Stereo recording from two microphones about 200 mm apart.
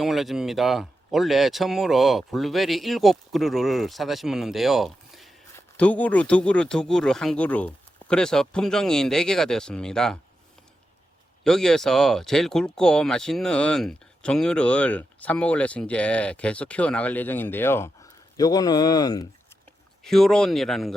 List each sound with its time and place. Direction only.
0.0 s speech: centre (ahead or behind)
11.4 s speech: centre (ahead or behind); by 19.3 s 20° left (ahead or behind)
20.0 s speech: centre (ahead or behind)